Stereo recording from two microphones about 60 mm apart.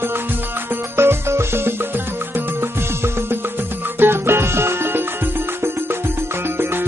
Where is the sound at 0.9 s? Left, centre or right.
Right.